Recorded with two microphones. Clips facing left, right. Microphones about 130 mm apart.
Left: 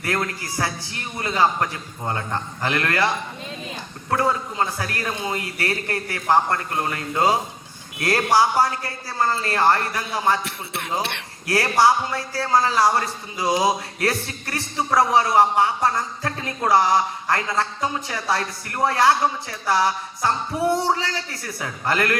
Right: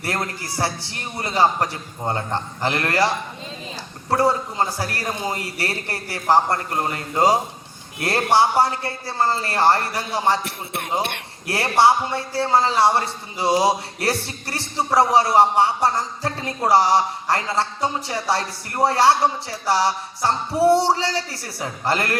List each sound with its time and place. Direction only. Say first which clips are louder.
0.0 s a man's voice: left 1 dB; 35° right (ahead or behind)